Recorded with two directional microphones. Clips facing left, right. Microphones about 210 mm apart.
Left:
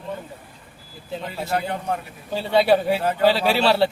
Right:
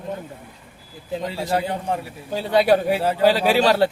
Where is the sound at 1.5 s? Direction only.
30° right (ahead or behind).